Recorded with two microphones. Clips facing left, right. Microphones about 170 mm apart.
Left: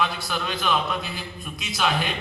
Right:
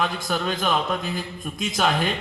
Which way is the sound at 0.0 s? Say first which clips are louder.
Right 2 dB; 45° right (ahead or behind).